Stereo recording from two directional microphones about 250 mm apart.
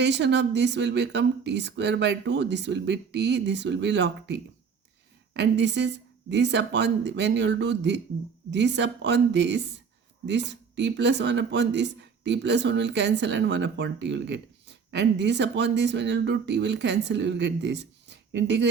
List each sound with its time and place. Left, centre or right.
0.0 s speech: right